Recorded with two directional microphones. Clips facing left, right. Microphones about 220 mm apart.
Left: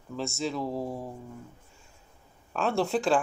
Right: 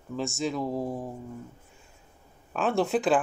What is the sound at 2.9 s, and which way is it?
Speech, 5° right (ahead or behind).